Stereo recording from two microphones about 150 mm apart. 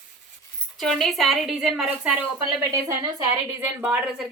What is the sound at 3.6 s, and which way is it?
Speech, 10° right (ahead or behind).